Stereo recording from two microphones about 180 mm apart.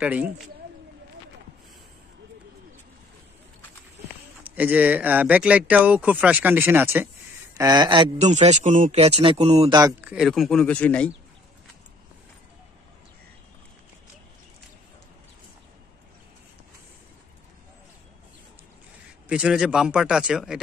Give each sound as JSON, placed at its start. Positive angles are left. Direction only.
{"t": 0.0, "sound": "speech", "side_deg": -5}
{"t": 4.4, "sound": "speech", "side_deg": -10}
{"t": 7.5, "sound": "speech", "side_deg": -20}
{"t": 8.2, "sound": "speech", "side_deg": -40}
{"t": 10.0, "sound": "a man's voice", "side_deg": -5}
{"t": 19.2, "sound": "a man's voice", "side_deg": -5}